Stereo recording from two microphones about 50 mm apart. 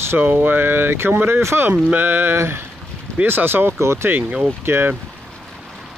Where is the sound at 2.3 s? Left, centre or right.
Right.